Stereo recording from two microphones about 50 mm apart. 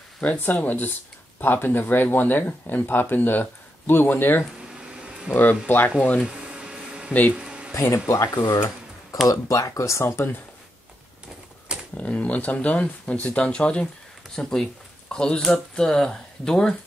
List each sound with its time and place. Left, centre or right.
0.2 s speech: left
4.6 s a sound: centre
5.3 s speech: left
6.2 s a sound: centre
7.7 s speech: left
8.1 s speech: left
9.5 s speech: left
12.0 s speech: left